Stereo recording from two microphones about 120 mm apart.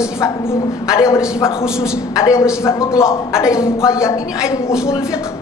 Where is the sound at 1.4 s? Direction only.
5° right (ahead or behind).